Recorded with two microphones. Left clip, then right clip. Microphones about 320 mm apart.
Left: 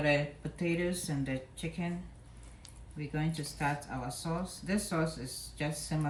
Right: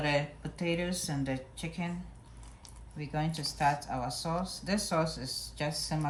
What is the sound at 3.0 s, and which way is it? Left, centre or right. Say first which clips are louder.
Speech: right 3 dB; centre.